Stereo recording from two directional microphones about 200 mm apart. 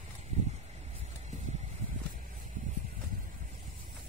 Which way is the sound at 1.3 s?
35° right (ahead or behind).